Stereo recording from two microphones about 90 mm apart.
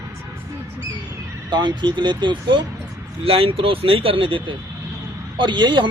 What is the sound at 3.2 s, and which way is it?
Speech, 85° right.